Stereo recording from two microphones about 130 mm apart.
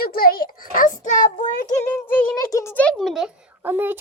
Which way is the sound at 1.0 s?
75° left (ahead or behind).